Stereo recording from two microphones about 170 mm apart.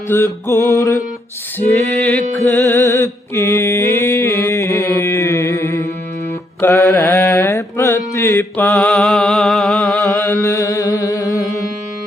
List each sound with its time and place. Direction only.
0.1 s music: 15° left (ahead or behind)
2.5 s music: 15° left (ahead or behind)
6.6 s mantra: 15° left (ahead or behind)
8.7 s a sound: 5° left (ahead or behind)
10.2 s mantra: 20° left (ahead or behind)